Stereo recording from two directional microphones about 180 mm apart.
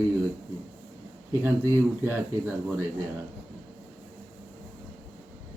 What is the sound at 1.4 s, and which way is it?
A man's voice, 10° right (ahead or behind).